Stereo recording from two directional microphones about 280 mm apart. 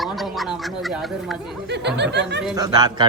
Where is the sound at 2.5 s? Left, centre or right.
Centre.